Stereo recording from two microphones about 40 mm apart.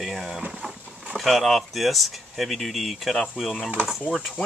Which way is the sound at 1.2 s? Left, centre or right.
Centre.